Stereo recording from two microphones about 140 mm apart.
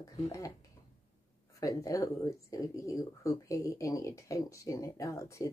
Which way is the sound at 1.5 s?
25° left (ahead or behind).